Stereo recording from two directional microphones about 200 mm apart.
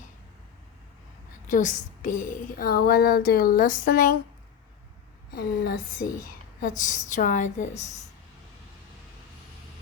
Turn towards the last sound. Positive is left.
turn(degrees=35)  # may be behind; listen again after turning